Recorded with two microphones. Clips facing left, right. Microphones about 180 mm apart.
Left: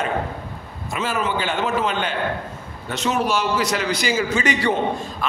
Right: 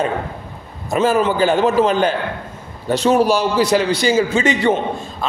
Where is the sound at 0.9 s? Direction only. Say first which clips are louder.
Right 8 dB; 40° right (ahead or behind).